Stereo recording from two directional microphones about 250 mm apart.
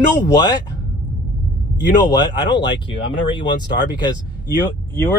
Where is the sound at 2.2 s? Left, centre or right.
Centre.